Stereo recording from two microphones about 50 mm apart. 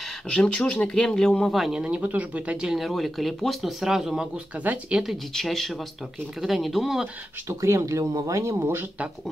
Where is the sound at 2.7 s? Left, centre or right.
Centre.